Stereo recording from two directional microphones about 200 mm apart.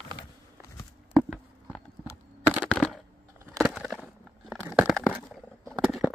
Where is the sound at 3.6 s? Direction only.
Centre (ahead or behind).